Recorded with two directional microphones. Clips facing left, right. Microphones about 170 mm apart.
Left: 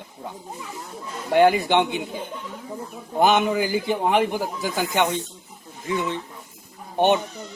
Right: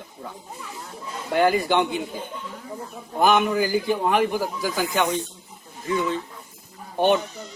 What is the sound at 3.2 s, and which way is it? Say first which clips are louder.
A man's voice: even; 20° left (ahead or behind).